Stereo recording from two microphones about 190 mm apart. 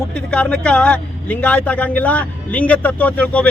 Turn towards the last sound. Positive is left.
turn(degrees=5)  # may be behind; listen again after turning